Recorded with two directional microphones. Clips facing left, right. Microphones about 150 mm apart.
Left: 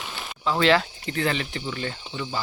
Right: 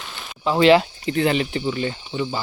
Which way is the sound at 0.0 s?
5° left (ahead or behind).